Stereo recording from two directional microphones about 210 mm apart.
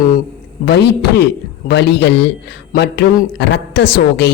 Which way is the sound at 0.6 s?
55° left (ahead or behind).